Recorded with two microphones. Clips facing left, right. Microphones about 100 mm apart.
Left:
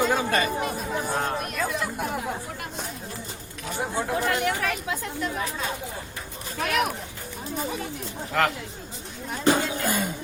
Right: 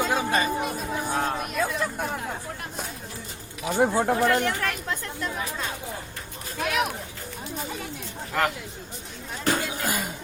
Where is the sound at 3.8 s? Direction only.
60° right (ahead or behind).